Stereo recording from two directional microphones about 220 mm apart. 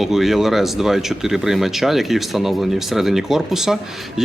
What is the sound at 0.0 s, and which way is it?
Speech, centre (ahead or behind).